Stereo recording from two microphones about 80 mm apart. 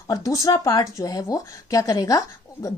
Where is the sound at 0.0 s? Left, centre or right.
Left.